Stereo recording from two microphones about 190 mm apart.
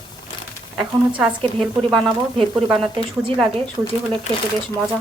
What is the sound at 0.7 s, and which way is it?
Speech, 5° right (ahead or behind).